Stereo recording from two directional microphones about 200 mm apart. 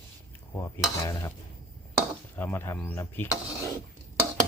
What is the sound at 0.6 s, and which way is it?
Speech, 15° left (ahead or behind).